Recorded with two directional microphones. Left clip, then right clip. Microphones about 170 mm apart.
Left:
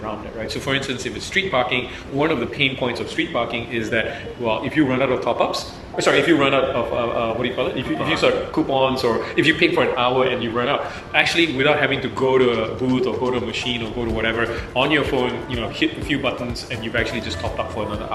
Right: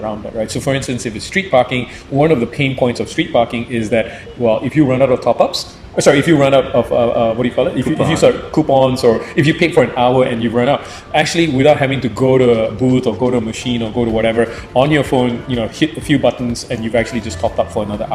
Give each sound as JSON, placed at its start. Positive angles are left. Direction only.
{"t": 0.3, "sound": "a man's voice", "side_deg": -30}
{"t": 13.3, "sound": "a man's voice", "side_deg": -35}